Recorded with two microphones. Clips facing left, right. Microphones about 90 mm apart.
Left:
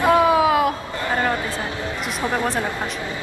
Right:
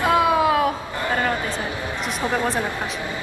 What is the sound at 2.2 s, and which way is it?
Speech, 15° left (ahead or behind).